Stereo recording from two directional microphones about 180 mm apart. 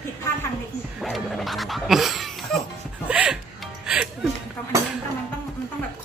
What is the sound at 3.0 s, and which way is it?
Music, 5° right (ahead or behind).